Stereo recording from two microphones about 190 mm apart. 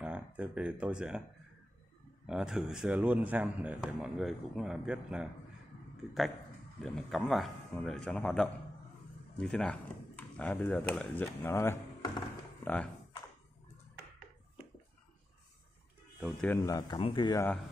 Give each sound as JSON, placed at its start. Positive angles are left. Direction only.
{"t": 0.0, "sound": "speech", "side_deg": -5}
{"t": 2.2, "sound": "speech", "side_deg": -5}
{"t": 6.8, "sound": "speech", "side_deg": 0}
{"t": 16.2, "sound": "speech", "side_deg": 0}
{"t": 16.4, "sound": "speech", "side_deg": 20}